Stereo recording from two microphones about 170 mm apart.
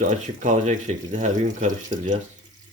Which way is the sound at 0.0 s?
45° right (ahead or behind).